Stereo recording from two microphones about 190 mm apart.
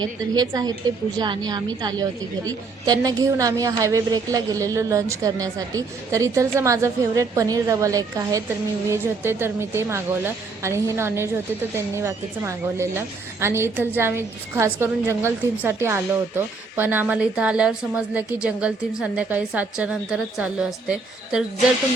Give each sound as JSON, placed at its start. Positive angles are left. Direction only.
{"t": 0.0, "sound": "a woman's voice", "side_deg": -20}